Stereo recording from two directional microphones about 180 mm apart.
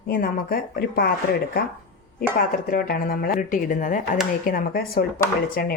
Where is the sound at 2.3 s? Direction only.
50° left (ahead or behind).